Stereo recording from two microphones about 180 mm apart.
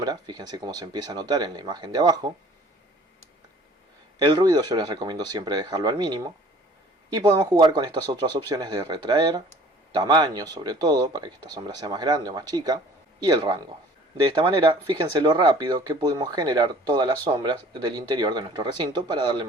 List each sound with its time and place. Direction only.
0.0 s speech: 20° right (ahead or behind)
4.2 s speech: 25° right (ahead or behind)